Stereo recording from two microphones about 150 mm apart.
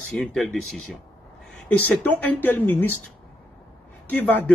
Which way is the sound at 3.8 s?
10° left (ahead or behind).